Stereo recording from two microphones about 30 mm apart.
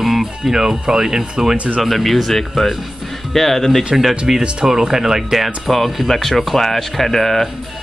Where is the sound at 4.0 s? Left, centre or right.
Centre.